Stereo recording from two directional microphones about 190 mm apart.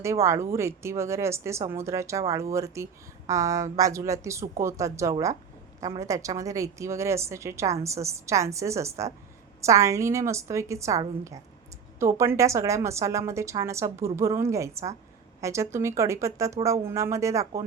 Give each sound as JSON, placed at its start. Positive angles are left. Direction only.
{"t": 0.0, "sound": "a woman's voice", "side_deg": -15}